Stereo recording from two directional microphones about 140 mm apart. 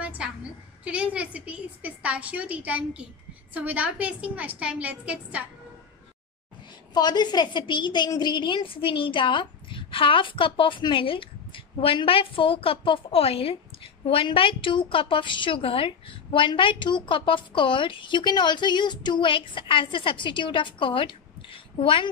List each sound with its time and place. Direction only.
0.0 s a woman's voice: 10° right (ahead or behind)
6.9 s a woman's voice: 30° left (ahead or behind)